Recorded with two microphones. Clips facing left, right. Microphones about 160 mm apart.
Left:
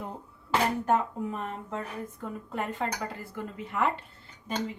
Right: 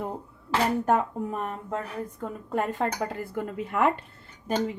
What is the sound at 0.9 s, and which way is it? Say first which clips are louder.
Speech: right 2 dB; 45° right (ahead or behind).